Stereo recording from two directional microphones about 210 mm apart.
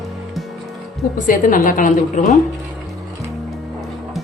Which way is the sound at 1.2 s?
40° left (ahead or behind).